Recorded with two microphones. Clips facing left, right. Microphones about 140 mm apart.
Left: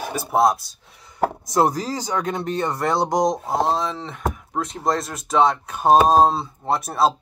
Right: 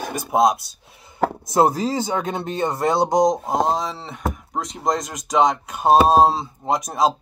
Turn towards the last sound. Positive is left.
turn(degrees=-15)  # may be behind; listen again after turning